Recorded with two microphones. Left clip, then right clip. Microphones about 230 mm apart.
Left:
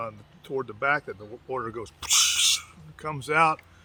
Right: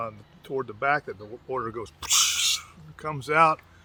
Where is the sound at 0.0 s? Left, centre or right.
Centre.